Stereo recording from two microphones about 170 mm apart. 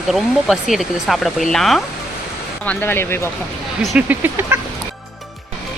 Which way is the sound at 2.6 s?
15° left (ahead or behind).